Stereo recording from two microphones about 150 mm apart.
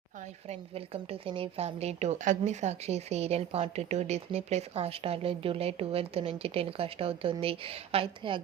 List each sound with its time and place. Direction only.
0.4 s a woman's voice: 40° right (ahead or behind)